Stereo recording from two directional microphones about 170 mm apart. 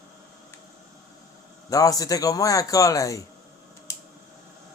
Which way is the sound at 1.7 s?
20° left (ahead or behind).